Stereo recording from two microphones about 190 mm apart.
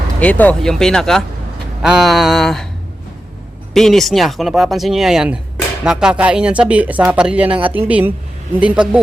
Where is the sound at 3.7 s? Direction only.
Centre (ahead or behind).